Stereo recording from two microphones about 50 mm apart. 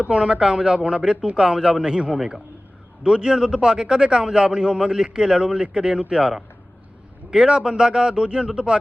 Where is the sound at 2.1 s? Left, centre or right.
Centre.